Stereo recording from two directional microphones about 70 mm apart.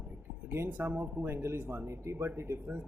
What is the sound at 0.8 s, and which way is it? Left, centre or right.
Speech, right.